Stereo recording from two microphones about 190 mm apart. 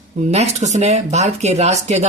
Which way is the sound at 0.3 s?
35° right (ahead or behind).